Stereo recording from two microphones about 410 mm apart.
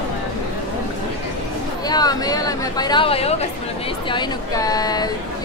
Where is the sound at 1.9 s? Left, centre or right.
Centre.